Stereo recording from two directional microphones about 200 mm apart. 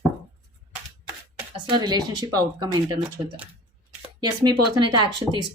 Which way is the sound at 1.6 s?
20° right (ahead or behind).